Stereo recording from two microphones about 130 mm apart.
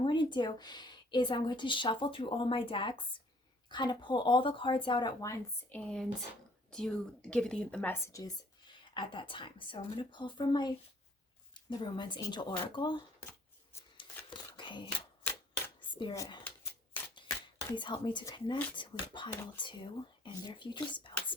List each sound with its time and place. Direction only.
0.0 s speech: 35° left (ahead or behind)
5.6 s a woman's voice: 10° left (ahead or behind)
8.0 s a woman's voice: 25° left (ahead or behind)
13.9 s a sound: 40° left (ahead or behind)
16.1 s speech: 25° left (ahead or behind)
17.2 s a sound: 35° left (ahead or behind)
18.3 s speech: 40° left (ahead or behind)